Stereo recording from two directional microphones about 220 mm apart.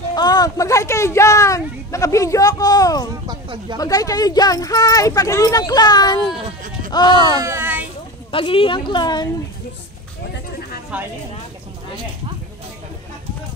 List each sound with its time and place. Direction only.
0.1 s speech: 20° left (ahead or behind)
3.3 s speech: 20° right (ahead or behind)
3.7 s speech: 15° left (ahead or behind)
7.3 s a sound: 10° right (ahead or behind)
8.3 s speech: 25° left (ahead or behind)